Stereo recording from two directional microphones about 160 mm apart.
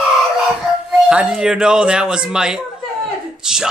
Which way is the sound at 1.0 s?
5° right (ahead or behind).